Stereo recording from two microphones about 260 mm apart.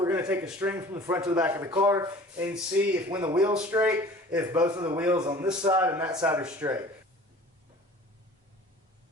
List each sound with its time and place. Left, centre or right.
0.0 s speech: centre